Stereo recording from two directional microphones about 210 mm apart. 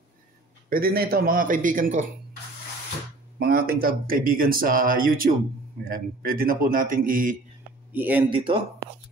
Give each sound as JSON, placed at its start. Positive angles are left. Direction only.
{"t": 0.7, "sound": "a man's voice", "side_deg": -45}
{"t": 3.3, "sound": "a man's voice", "side_deg": -45}
{"t": 7.9, "sound": "speech", "side_deg": -10}
{"t": 8.3, "sound": "speech", "side_deg": -25}